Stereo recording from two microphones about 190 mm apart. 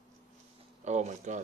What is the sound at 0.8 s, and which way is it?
Speech, 40° right (ahead or behind).